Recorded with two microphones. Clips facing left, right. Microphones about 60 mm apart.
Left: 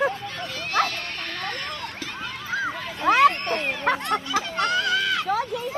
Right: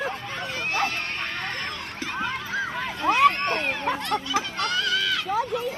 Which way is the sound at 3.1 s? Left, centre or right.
Left.